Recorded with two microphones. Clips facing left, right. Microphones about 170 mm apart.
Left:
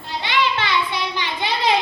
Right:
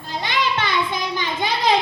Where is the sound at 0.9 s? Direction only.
45° right (ahead or behind).